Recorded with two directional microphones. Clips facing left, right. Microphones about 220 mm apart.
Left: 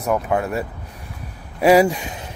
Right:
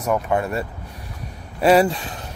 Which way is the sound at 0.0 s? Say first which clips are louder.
Left 1 dB; 5° left (ahead or behind).